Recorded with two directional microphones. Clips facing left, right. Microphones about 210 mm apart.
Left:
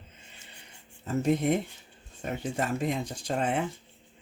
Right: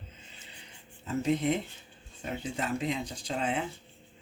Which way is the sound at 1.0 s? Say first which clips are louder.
Left 2 dB; 45° left (ahead or behind).